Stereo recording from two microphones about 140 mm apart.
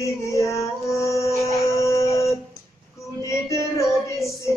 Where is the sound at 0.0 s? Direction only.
20° left (ahead or behind).